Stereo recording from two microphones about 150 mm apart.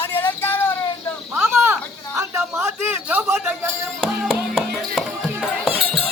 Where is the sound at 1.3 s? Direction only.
5° right (ahead or behind).